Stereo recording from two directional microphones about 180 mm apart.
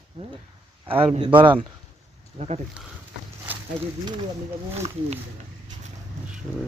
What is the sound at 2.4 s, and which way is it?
Speech, 40° right (ahead or behind).